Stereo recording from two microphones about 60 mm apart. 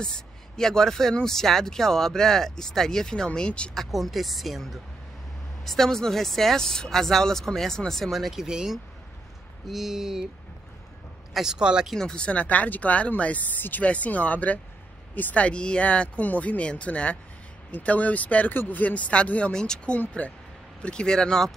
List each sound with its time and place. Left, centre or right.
0.0 s speech: centre
3.7 s speech: centre
11.3 s speech: centre
11.9 s speech: centre